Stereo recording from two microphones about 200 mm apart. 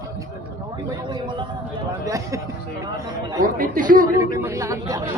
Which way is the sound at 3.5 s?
45° right (ahead or behind).